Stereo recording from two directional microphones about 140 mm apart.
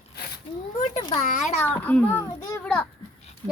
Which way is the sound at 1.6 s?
10° left (ahead or behind).